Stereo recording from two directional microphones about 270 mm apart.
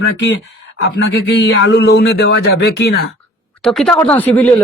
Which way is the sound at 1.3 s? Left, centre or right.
Left.